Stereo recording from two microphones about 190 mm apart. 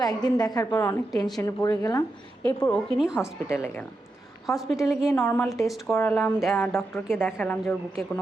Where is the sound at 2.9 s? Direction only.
Centre (ahead or behind).